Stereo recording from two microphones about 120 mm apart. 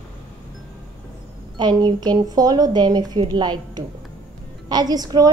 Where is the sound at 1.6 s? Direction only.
35° right (ahead or behind).